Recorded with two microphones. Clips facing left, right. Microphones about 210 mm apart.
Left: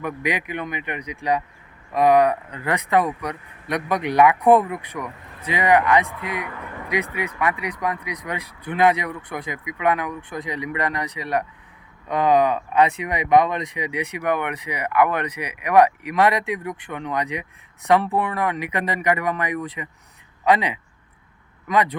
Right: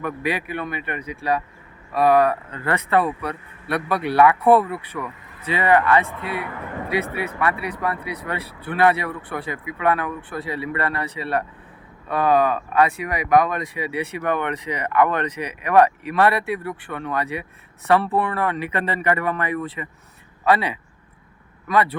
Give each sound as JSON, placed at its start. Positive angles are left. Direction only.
{"t": 0.0, "sound": "speech", "side_deg": 15}